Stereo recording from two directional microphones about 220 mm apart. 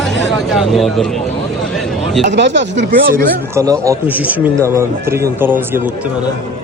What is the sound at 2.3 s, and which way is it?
Speech, 55° right (ahead or behind).